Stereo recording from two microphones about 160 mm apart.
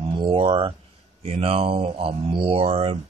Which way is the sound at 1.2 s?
40° right (ahead or behind).